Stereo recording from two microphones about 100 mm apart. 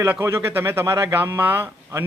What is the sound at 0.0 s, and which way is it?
A man's voice, 25° right (ahead or behind).